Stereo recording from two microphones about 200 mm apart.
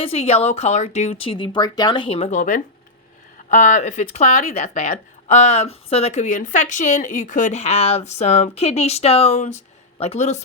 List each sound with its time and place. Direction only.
0.0 s speech: 30° left (ahead or behind)